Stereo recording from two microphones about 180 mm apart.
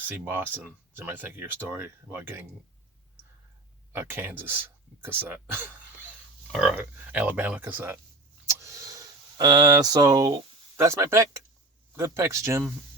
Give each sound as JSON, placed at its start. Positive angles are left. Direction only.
{"t": 0.3, "sound": "speech", "side_deg": -10}
{"t": 3.9, "sound": "speech", "side_deg": -10}